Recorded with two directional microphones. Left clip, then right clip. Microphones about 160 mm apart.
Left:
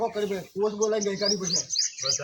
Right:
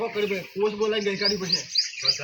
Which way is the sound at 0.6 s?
25° left (ahead or behind).